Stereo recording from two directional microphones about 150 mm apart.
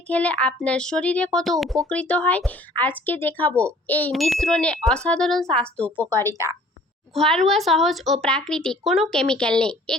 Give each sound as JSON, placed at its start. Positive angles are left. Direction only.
{"t": 0.1, "sound": "a woman's voice", "side_deg": 10}
{"t": 4.1, "sound": "speech", "side_deg": 0}
{"t": 6.2, "sound": "a woman's voice", "side_deg": -20}
{"t": 7.1, "sound": "speech", "side_deg": 0}